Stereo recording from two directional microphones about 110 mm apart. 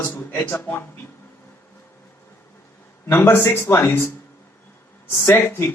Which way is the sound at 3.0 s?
20° left (ahead or behind).